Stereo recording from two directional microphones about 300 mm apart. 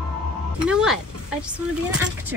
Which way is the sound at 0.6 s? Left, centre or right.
Centre.